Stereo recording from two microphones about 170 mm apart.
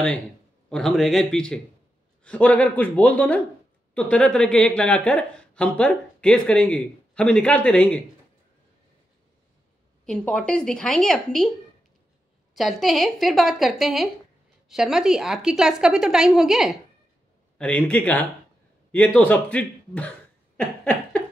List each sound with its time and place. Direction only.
0.7 s a woman's voice: 5° left (ahead or behind)
10.0 s a woman's voice: 5° left (ahead or behind)
12.5 s a woman's voice: centre (ahead or behind)